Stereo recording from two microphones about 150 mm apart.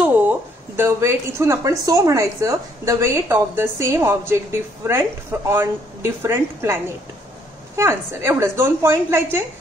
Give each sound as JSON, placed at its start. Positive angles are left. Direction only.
{"t": 0.0, "sound": "a woman's voice", "side_deg": -10}